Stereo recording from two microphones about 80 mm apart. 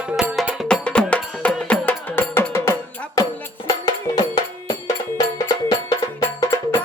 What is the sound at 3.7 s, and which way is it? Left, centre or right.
Music, left.